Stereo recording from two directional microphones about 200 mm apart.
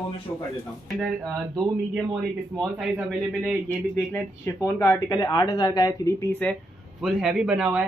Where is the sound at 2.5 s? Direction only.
Centre (ahead or behind).